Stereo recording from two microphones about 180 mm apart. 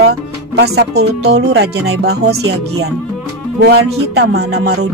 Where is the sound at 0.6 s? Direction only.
65° right (ahead or behind).